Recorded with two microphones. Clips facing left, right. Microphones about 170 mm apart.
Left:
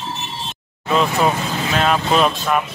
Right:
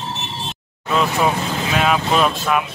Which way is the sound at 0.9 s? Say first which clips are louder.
Left 1 dB; 5° right (ahead or behind).